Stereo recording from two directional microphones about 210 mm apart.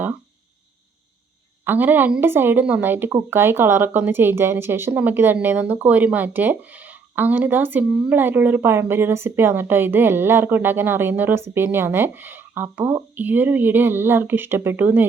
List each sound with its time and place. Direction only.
1.6 s speech: 10° right (ahead or behind)